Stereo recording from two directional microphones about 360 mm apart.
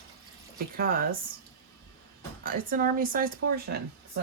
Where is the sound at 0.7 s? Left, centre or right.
Right.